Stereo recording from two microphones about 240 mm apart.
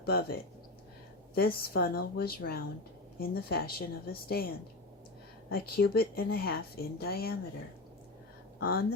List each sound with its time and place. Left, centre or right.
0.0 s a woman's voice: left
1.4 s a woman's voice: left
8.5 s speech: left